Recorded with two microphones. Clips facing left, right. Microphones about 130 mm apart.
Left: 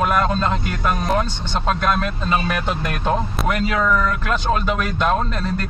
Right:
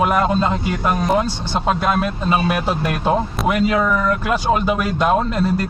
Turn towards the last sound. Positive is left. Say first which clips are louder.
# right 5 dB
turn(degrees=-10)  # may be behind; listen again after turning